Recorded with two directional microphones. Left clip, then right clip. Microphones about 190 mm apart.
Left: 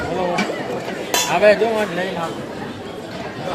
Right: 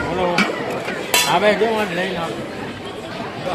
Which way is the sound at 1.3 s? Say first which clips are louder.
Left 4 dB; 20° right (ahead or behind).